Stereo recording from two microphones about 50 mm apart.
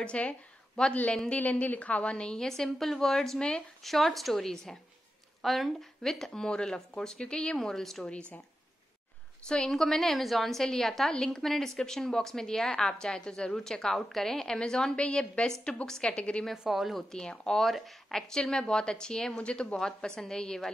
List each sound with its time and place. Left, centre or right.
0.0 s speech: left
1.3 s a woman's voice: left; by 3.6 s centre
3.8 s a woman's voice: centre
7.5 s a woman's voice: centre
8.1 s a woman's voice: left
9.5 s a woman's voice: centre
16.5 s speech: centre
17.1 s a woman's voice: centre
17.6 s speech: centre
18.3 s a woman's voice: centre